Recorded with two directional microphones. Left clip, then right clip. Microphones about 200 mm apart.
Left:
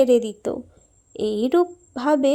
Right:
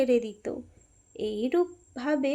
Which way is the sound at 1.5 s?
25° left (ahead or behind).